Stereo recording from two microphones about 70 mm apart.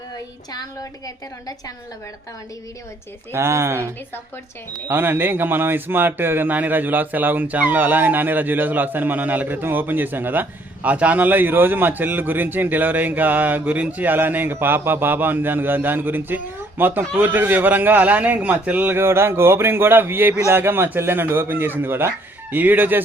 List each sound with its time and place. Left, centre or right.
0.5 s a woman's voice: left
3.3 s a man's voice: right
4.9 s a man's voice: right
18.9 s a man's voice: right